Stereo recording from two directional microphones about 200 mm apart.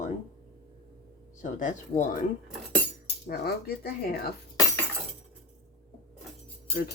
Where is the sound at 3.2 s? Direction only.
50° left (ahead or behind).